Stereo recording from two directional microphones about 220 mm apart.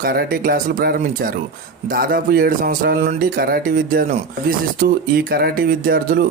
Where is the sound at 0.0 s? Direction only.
40° right (ahead or behind).